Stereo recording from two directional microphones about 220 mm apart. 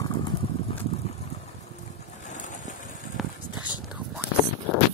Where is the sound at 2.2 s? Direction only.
35° left (ahead or behind).